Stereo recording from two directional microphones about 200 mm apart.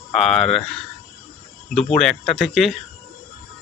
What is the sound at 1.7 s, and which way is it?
Speech, 5° left (ahead or behind).